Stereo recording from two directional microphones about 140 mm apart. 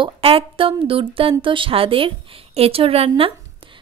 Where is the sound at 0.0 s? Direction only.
40° right (ahead or behind).